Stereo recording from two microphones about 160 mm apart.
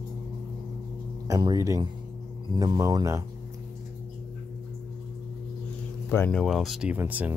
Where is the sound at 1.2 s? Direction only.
25° right (ahead or behind).